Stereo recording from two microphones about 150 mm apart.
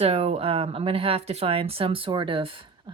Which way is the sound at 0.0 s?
45° right (ahead or behind).